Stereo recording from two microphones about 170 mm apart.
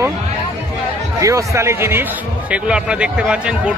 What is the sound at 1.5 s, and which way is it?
Speech, 15° right (ahead or behind).